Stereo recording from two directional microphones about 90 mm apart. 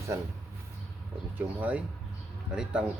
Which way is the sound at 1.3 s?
15° right (ahead or behind).